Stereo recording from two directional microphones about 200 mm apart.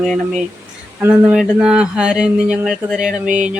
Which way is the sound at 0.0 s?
5° left (ahead or behind).